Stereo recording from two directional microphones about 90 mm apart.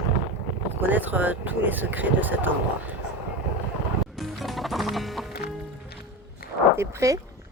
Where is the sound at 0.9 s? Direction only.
20° right (ahead or behind).